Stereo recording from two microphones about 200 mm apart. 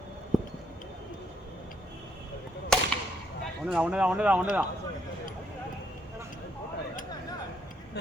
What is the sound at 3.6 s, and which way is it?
Speech, 5° right (ahead or behind).